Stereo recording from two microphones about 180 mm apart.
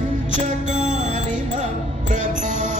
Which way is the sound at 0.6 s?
40° right (ahead or behind).